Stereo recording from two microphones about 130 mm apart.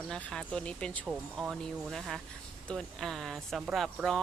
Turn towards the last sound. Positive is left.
turn(degrees=0)  # may be behind; listen again after turning